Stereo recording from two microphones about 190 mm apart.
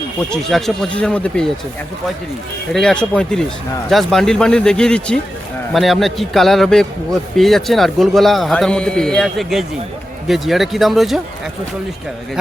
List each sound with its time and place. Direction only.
0.3 s a man's voice: centre (ahead or behind)
2.7 s a man's voice: 5° left (ahead or behind)